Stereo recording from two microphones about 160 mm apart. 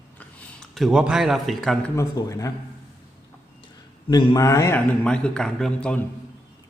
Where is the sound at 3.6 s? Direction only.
30° left (ahead or behind).